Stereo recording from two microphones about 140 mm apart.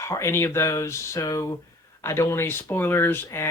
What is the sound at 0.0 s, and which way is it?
Speech, 20° left (ahead or behind).